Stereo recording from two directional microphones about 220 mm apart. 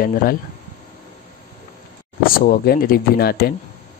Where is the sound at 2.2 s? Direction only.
40° left (ahead or behind).